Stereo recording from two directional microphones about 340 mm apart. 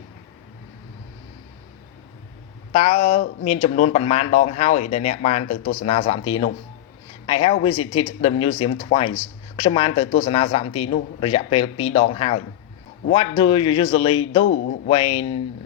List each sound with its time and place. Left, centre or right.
2.7 s speech: centre
7.3 s speech: centre
14.4 s speech: left
14.8 s speech: centre